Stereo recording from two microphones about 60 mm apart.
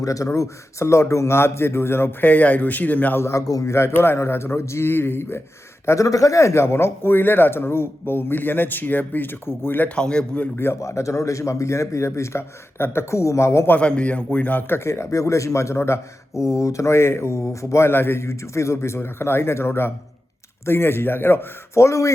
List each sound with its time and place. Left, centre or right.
0.0 s speech: left
0.3 s speech: left
2.3 s speech: left
3.2 s speech: left
3.4 s speech: left
3.7 s a man's voice: left
6.1 s a man's voice: left
9.9 s speech: centre
10.6 s speech: left
13.7 s speech: centre
14.7 s a man's voice: left
21.8 s speech: left